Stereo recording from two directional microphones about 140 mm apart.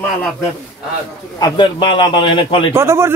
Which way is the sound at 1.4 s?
35° left (ahead or behind).